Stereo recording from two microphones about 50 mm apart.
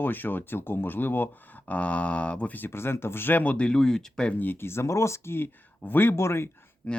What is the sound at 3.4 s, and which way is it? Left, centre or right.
Speech, left.